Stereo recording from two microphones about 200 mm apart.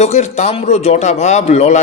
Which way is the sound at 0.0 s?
35° left (ahead or behind).